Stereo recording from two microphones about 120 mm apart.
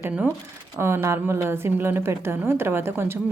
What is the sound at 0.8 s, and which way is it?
A woman's voice, 20° right (ahead or behind).